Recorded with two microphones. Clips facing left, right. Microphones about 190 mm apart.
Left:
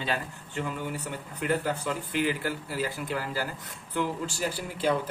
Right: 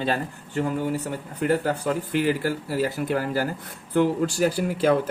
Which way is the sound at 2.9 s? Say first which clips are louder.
Right 7 dB; 55° right (ahead or behind).